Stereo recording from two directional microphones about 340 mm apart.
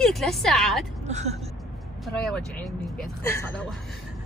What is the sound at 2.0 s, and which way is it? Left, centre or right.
A woman's voice, centre.